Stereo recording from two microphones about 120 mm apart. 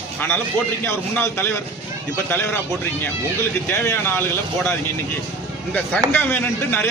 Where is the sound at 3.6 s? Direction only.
20° left (ahead or behind).